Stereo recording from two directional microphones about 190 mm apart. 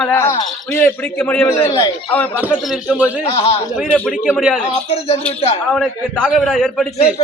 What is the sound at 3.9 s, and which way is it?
Speech, 5° left (ahead or behind).